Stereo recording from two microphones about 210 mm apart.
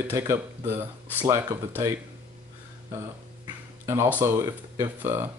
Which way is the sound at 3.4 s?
10° right (ahead or behind).